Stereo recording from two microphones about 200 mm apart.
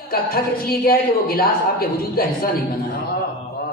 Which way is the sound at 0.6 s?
50° left (ahead or behind).